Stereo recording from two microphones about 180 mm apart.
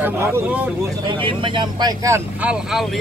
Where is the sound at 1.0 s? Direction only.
25° right (ahead or behind); by 3.0 s centre (ahead or behind).